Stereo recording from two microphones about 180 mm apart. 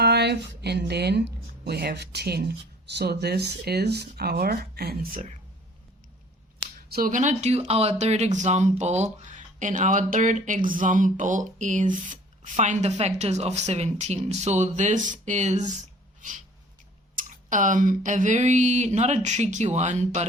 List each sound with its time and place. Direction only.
0.0 s speech: 65° right (ahead or behind)
6.6 s speech: 60° right (ahead or behind); by 15.7 s 40° right (ahead or behind)
17.2 s speech: 45° right (ahead or behind)